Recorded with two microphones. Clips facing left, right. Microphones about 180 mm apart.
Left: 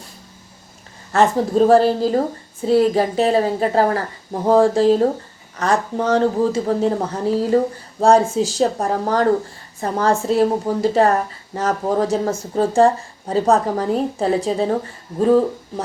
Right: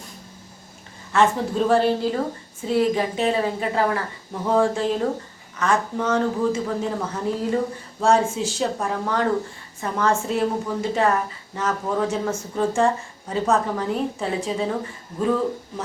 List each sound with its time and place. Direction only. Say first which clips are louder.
1.1 s speech: left 4 dB; 40° left (ahead or behind)